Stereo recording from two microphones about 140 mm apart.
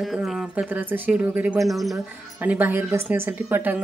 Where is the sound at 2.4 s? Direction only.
10° right (ahead or behind).